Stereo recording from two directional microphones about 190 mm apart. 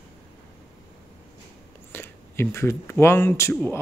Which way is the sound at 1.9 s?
10° left (ahead or behind).